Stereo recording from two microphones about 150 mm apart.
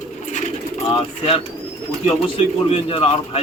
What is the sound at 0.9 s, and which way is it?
Speech, 40° left (ahead or behind).